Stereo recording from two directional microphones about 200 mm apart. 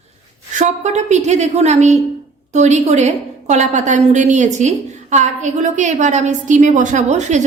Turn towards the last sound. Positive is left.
turn(degrees=-35)  # may be behind; listen again after turning